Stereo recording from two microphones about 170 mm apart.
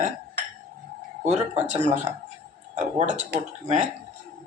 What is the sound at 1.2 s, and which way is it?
Speech, 45° right (ahead or behind).